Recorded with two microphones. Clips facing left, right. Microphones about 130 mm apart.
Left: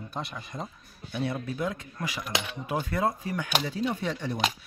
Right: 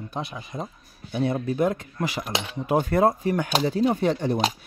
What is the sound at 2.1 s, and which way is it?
Speech, 40° right (ahead or behind).